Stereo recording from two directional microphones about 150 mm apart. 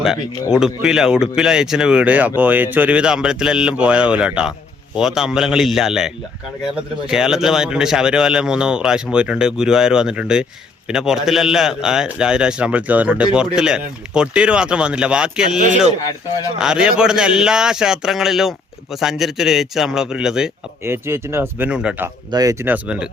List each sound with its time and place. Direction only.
0.5 s speech: 5° right (ahead or behind)
15.5 s speech: 55° right (ahead or behind)
16.6 s speech: 5° right (ahead or behind)
20.8 s speech: 15° right (ahead or behind)
22.3 s speech: 25° right (ahead or behind)